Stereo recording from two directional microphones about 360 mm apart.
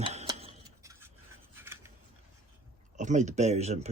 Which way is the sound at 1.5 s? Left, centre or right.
Centre.